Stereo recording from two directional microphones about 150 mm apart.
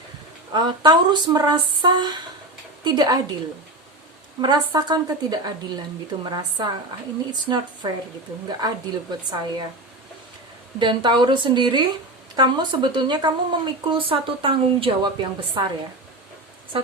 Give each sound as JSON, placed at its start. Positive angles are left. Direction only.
{"t": 0.5, "sound": "speech", "side_deg": -30}
{"t": 4.4, "sound": "speech", "side_deg": -30}
{"t": 10.8, "sound": "speech", "side_deg": -30}